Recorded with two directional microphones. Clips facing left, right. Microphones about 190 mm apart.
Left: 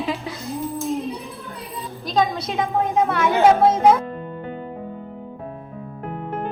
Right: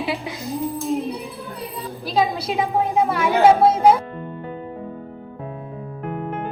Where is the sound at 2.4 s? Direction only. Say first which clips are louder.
Right 1 dB; 30° right (ahead or behind).